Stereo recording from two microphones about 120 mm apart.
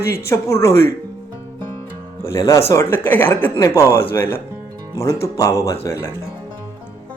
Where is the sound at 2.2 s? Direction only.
25° left (ahead or behind).